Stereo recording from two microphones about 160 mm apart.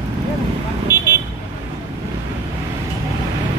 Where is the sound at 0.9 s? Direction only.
15° right (ahead or behind).